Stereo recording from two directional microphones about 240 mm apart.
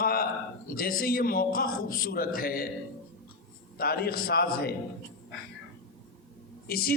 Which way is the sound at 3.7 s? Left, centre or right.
Left.